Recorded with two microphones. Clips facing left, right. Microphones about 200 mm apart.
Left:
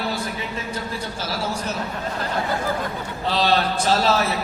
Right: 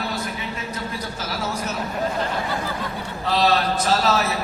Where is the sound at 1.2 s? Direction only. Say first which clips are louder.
Left 1 dB; 30° left (ahead or behind).